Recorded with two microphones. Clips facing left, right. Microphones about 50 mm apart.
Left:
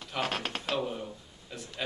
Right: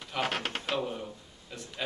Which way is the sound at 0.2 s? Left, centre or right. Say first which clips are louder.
Right 1 dB; centre.